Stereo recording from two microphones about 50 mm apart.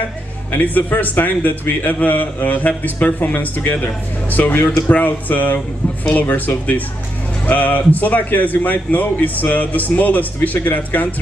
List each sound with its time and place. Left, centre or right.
0.5 s a man's voice: left